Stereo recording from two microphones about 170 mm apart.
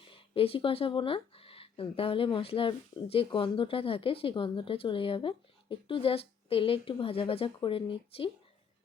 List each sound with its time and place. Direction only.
0.0 s speech: 30° left (ahead or behind)